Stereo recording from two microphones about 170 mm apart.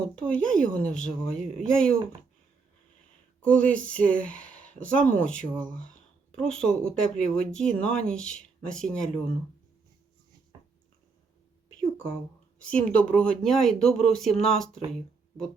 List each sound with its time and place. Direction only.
0.2 s speech: 5° left (ahead or behind)
3.4 s speech: 10° left (ahead or behind)
10.5 s a sound: 25° right (ahead or behind)
12.7 s speech: 5° left (ahead or behind)